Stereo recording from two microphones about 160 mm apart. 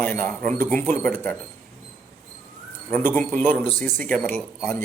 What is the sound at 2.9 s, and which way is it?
A woman's voice, 10° left (ahead or behind).